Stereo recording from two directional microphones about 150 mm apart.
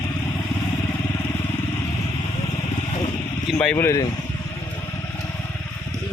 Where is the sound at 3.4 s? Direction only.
5° left (ahead or behind).